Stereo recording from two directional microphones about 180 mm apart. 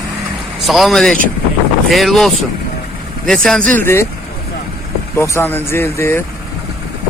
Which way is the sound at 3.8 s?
15° left (ahead or behind).